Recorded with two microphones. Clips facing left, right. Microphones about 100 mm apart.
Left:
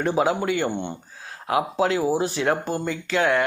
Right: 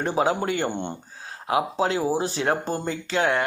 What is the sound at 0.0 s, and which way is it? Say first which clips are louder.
A man's voice: left 1 dB; 30° right (ahead or behind).